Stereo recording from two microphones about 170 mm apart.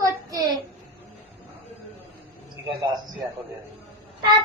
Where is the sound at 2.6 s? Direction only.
15° right (ahead or behind).